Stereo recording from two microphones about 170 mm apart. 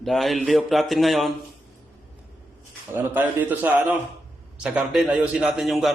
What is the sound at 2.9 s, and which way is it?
A man's voice, 10° right (ahead or behind).